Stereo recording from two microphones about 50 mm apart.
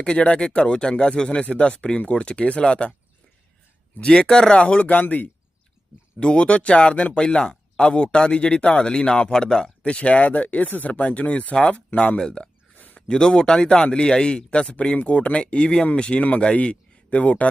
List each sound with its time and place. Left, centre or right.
0.0 s speech: centre
4.0 s speech: centre; by 5.3 s left
6.1 s speech: left
12.2 s a sound: centre
13.1 s speech: centre